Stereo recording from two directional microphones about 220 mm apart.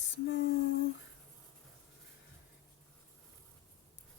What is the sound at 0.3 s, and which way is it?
Female singing, 55° left (ahead or behind).